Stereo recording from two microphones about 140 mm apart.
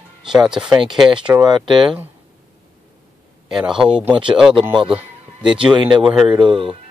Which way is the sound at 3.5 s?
5° right (ahead or behind).